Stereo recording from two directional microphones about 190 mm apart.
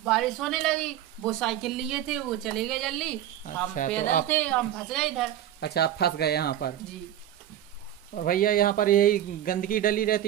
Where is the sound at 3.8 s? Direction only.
40° left (ahead or behind).